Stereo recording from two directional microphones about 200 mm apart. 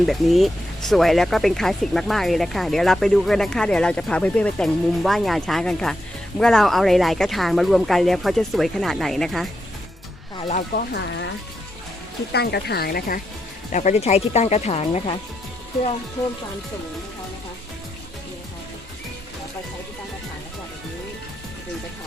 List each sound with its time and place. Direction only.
0.0 s speech: centre (ahead or behind)
10.5 s speech: 50° left (ahead or behind)
12.3 s speech: 55° left (ahead or behind); by 15.1 s 30° left (ahead or behind)